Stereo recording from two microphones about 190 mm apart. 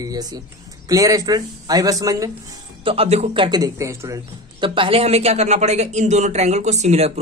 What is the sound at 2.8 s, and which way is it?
A man's voice, 30° right (ahead or behind).